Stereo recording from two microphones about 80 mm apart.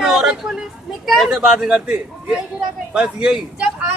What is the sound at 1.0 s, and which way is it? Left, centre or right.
Speech, centre.